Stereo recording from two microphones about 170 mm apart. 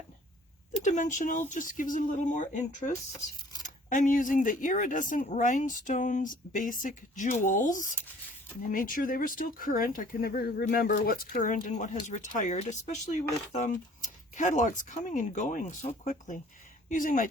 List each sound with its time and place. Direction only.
0.8 s speech: 45° left (ahead or behind)